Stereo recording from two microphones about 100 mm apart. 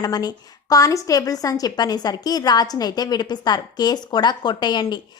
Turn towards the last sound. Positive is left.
turn(degrees=45)  # may be behind; listen again after turning